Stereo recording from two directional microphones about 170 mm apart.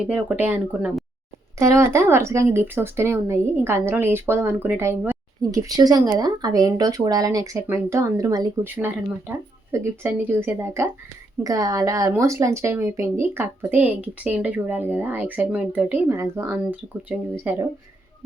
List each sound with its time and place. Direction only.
0.0 s speech: 10° right (ahead or behind)
8.6 s speech: 10° right (ahead or behind)